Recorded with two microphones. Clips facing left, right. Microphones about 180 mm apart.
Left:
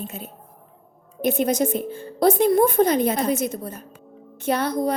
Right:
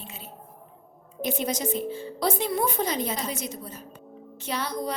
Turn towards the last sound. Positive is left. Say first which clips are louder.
# left 8 dB
turn(degrees=55)  # may be behind; listen again after turning